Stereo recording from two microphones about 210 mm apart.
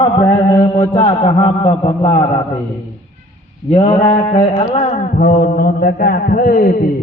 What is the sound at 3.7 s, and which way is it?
Mantra, 30° left (ahead or behind).